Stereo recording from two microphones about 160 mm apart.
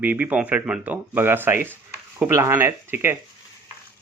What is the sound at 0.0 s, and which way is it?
Speech, 10° right (ahead or behind).